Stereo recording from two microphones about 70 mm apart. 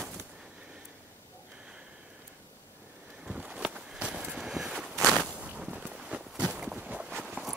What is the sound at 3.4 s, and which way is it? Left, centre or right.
Walk, centre.